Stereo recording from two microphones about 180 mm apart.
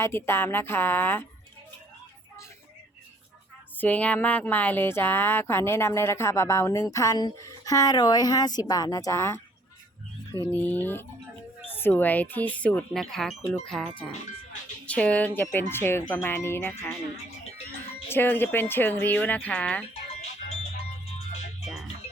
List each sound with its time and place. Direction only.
0.0 s speech: 15° left (ahead or behind)
3.8 s speech: 10° left (ahead or behind)
10.4 s speech: 10° left (ahead or behind)
18.1 s speech: 10° left (ahead or behind)
21.2 s music: 40° left (ahead or behind)